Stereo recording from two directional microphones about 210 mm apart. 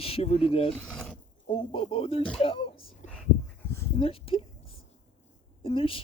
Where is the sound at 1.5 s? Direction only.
25° left (ahead or behind).